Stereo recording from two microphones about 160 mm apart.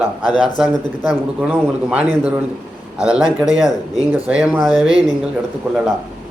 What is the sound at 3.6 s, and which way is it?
Speech, 20° left (ahead or behind).